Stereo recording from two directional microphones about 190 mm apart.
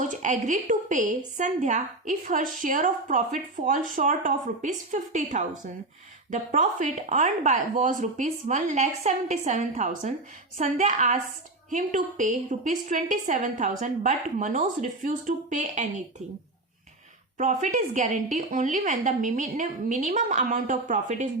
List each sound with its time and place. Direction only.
0.0 s a woman's voice: 40° right (ahead or behind)
17.3 s a woman's voice: 40° right (ahead or behind)